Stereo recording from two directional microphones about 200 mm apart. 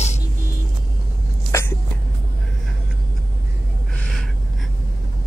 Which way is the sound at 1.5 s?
15° left (ahead or behind).